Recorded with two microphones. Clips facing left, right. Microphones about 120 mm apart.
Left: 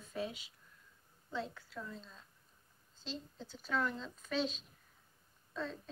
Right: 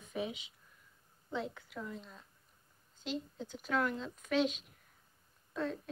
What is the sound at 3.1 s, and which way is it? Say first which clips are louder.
A woman's voice: right 6 dB; 15° right (ahead or behind).